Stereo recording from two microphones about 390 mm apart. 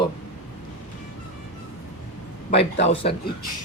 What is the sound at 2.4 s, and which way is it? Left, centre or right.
Speech, centre.